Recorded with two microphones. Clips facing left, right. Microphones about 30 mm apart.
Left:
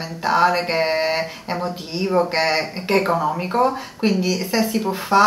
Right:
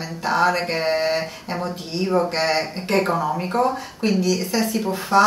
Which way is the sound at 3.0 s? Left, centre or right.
Centre.